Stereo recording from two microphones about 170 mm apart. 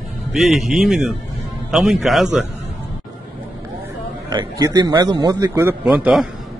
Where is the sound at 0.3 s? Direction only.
Centre (ahead or behind).